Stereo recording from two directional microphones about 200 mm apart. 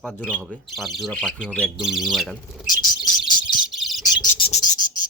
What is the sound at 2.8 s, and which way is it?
Bird, 20° left (ahead or behind).